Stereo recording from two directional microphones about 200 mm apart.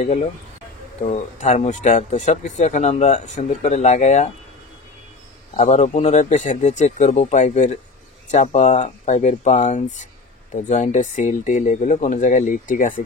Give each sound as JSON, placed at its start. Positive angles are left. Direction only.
{"t": 0.0, "sound": "speech", "side_deg": 30}
{"t": 5.6, "sound": "speech", "side_deg": 35}